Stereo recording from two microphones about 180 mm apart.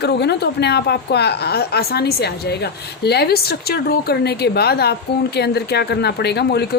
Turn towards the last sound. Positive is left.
turn(degrees=65)  # may be behind; listen again after turning